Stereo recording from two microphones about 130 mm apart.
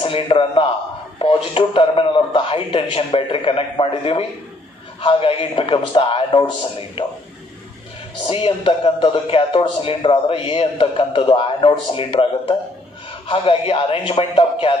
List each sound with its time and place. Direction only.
0.0 s a man's voice: 45° left (ahead or behind)
8.3 s a man's voice: 45° left (ahead or behind)